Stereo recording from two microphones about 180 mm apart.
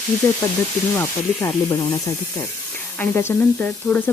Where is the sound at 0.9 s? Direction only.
15° left (ahead or behind).